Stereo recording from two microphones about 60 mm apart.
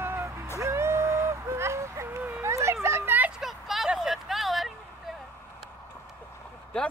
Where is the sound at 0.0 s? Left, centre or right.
Right.